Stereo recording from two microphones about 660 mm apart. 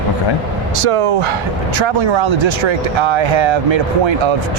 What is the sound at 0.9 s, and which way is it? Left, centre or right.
Speech, right.